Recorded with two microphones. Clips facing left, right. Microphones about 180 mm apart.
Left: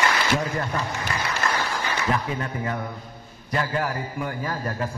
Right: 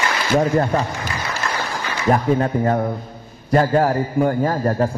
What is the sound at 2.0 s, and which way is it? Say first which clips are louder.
A man's voice: right 13 dB; 45° right (ahead or behind).